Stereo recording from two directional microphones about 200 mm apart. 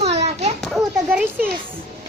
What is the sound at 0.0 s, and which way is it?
Children playing, 30° right (ahead or behind).